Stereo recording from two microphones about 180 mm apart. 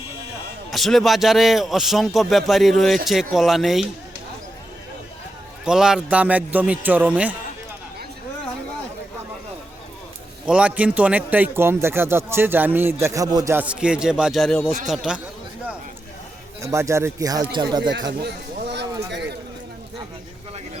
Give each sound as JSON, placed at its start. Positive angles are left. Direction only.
{"t": 0.7, "sound": "a man's voice", "side_deg": 0}
{"t": 5.6, "sound": "a man's voice", "side_deg": -5}
{"t": 10.4, "sound": "a man's voice", "side_deg": -5}
{"t": 16.7, "sound": "speech", "side_deg": -15}
{"t": 18.2, "sound": "a sound", "side_deg": -65}